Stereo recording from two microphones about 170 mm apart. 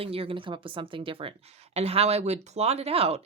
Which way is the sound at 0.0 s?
35° right (ahead or behind).